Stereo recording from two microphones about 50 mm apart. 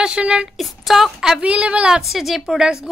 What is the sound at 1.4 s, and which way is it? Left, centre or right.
Speech, right.